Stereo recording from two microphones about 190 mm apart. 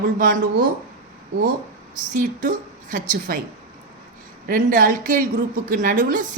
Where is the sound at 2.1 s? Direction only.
45° right (ahead or behind).